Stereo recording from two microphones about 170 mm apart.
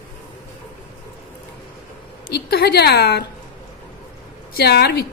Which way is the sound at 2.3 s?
70° left (ahead or behind).